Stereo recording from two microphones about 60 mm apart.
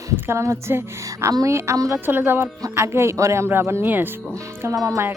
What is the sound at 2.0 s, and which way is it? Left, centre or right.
Speech, right.